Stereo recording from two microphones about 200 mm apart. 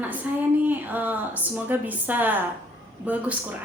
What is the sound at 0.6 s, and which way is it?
Speech, 10° right (ahead or behind).